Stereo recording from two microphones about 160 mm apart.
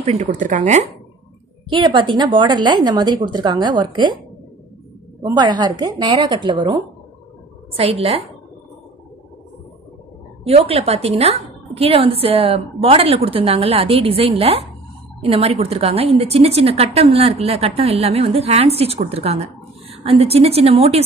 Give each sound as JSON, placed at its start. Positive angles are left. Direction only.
{"t": 0.0, "sound": "a woman's voice", "side_deg": -45}
{"t": 1.7, "sound": "a woman's voice", "side_deg": -30}
{"t": 5.2, "sound": "a woman's voice", "side_deg": -30}
{"t": 10.4, "sound": "a woman's voice", "side_deg": -40}